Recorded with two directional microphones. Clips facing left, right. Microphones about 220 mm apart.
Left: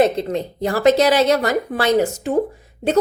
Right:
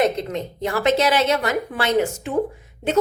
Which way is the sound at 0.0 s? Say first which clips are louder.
Left 4 dB; 30° left (ahead or behind).